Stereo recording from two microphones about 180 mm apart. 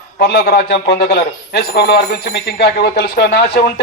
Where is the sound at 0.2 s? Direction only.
65° left (ahead or behind).